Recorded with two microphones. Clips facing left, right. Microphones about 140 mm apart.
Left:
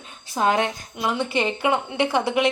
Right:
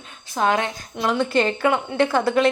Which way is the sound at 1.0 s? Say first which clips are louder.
Right 4 dB; 10° left (ahead or behind).